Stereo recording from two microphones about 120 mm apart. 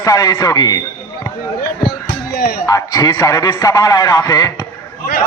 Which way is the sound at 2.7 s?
30° left (ahead or behind).